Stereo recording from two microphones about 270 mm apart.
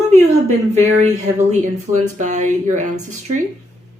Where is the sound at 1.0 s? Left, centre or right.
Right.